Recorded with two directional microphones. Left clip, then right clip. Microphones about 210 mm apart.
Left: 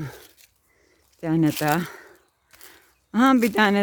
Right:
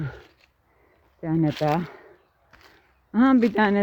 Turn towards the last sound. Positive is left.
turn(degrees=30)  # may be behind; listen again after turning